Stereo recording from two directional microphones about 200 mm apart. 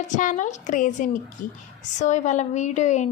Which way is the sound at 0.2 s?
40° left (ahead or behind).